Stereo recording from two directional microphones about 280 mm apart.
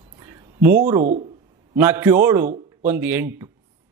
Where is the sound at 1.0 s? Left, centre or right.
Right.